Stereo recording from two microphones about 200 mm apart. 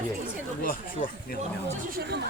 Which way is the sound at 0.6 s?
45° left (ahead or behind).